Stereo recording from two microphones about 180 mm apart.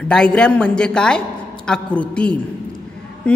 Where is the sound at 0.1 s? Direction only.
5° left (ahead or behind).